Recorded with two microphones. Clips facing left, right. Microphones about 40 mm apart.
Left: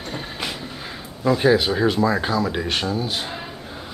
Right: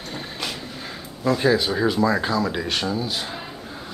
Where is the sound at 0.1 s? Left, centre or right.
Centre.